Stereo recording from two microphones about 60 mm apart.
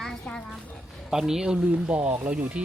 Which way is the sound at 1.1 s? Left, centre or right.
Centre.